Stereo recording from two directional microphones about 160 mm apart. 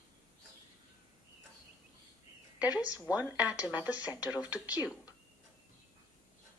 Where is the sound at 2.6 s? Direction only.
25° left (ahead or behind).